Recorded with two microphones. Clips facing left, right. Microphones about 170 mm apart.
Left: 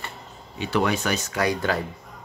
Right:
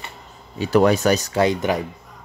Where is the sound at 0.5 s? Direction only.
40° right (ahead or behind).